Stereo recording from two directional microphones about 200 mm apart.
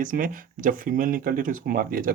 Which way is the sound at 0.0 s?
40° right (ahead or behind).